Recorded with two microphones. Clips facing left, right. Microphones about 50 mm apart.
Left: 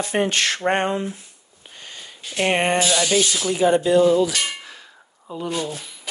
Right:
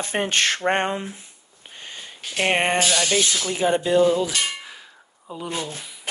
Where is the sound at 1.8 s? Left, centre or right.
Right.